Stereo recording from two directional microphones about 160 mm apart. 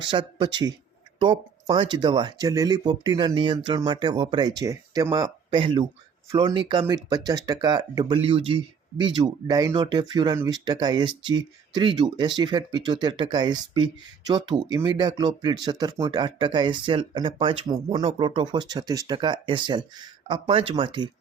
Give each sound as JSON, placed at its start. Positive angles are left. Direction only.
{"t": 0.0, "sound": "speech", "side_deg": -30}